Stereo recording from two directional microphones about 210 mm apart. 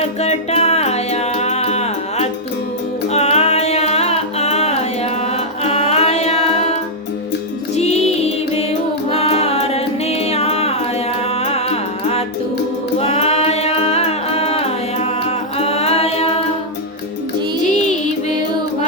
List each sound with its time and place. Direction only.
0.0 s music: 30° left (ahead or behind)
9.0 s music: 30° left (ahead or behind)